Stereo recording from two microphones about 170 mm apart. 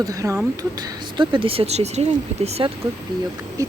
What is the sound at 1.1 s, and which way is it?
Speech, 30° right (ahead or behind).